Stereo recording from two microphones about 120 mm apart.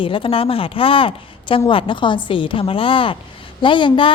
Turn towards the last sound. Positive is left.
turn(degrees=45)  # may be behind; listen again after turning